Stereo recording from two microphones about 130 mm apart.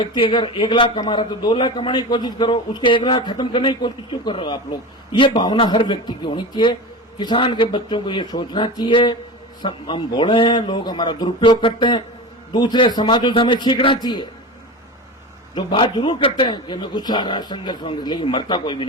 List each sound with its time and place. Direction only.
0.0 s a man's voice: 40° left (ahead or behind)
15.5 s a man's voice: 40° left (ahead or behind)